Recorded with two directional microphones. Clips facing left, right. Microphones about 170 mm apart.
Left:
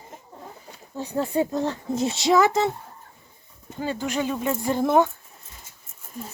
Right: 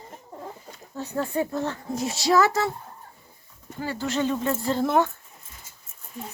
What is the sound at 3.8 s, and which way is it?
Speech, 15° left (ahead or behind).